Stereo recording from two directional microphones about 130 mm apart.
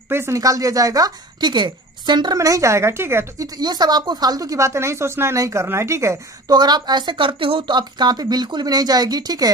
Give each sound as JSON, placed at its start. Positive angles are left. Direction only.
{"t": 0.1, "sound": "speech", "side_deg": -20}
{"t": 3.5, "sound": "speech", "side_deg": -30}